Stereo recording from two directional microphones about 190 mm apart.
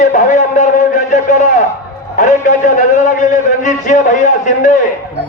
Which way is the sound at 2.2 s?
40° left (ahead or behind).